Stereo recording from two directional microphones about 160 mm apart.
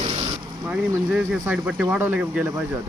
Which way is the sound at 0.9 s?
10° right (ahead or behind).